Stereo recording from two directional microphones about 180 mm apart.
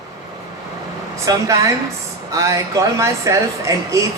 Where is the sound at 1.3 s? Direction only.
20° right (ahead or behind).